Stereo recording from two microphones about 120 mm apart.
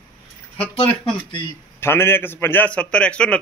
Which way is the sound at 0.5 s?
55° left (ahead or behind).